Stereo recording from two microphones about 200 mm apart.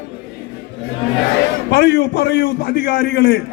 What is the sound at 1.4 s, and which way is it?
A man's voice, 60° left (ahead or behind).